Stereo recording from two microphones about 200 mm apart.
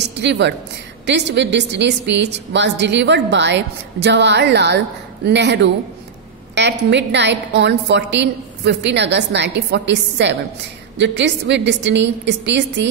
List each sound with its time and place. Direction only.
0.1 s a woman's voice: 60° right (ahead or behind)